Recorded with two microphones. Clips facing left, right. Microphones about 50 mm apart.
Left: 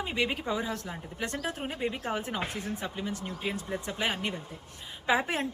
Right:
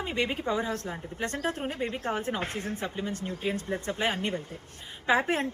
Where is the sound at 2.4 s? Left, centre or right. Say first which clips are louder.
Right 2 dB; right.